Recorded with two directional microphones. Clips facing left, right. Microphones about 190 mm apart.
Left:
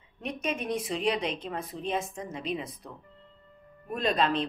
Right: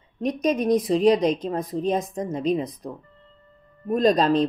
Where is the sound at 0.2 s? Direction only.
35° right (ahead or behind).